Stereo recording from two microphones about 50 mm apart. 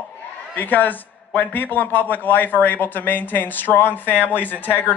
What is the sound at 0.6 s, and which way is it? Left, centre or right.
A man's voice, left.